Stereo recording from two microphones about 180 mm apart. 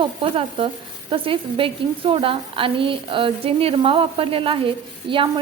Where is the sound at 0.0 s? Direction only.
30° right (ahead or behind).